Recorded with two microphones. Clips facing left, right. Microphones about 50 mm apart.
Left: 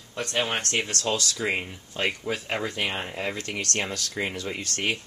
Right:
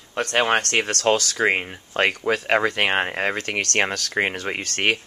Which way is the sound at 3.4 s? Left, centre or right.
Right.